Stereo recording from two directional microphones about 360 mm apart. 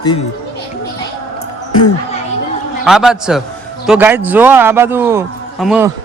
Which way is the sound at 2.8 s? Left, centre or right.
Centre.